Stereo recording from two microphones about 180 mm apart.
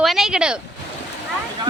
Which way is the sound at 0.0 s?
Centre (ahead or behind).